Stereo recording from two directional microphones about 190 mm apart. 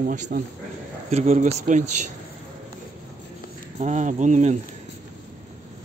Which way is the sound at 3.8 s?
40° right (ahead or behind).